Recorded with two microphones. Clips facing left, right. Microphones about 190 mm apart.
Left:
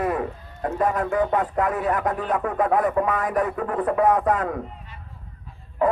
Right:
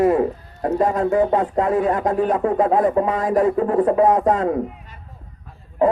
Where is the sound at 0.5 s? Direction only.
35° right (ahead or behind).